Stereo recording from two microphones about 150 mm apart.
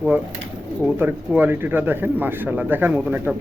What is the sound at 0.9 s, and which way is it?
A man's voice, 15° right (ahead or behind).